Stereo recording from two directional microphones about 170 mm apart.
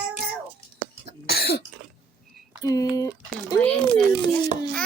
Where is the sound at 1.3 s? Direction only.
65° left (ahead or behind).